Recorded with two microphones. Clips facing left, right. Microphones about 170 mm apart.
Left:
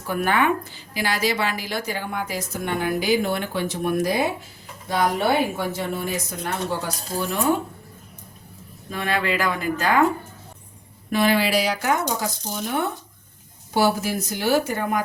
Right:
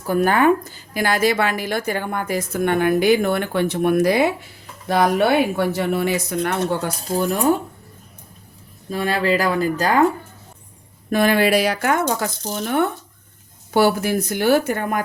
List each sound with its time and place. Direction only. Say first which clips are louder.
0.1 s a woman's voice: right 5 dB; 40° right (ahead or behind)
8.9 s speech: right 5 dB; 35° right (ahead or behind)
11.1 s speech: right 4 dB; 50° right (ahead or behind)